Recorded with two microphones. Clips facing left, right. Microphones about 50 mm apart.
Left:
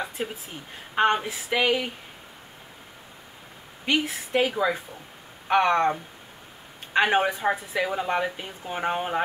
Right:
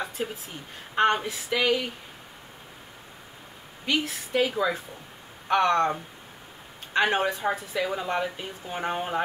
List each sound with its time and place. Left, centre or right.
0.9 s speech: centre
3.8 s a woman's voice: centre